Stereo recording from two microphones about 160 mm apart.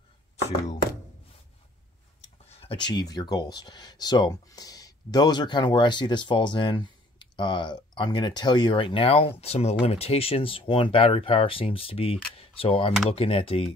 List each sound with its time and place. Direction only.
2.4 s tick-tock: 40° left (ahead or behind)
2.9 s speech: 25° left (ahead or behind)